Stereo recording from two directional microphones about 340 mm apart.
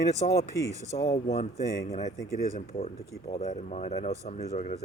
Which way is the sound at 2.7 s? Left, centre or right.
Centre.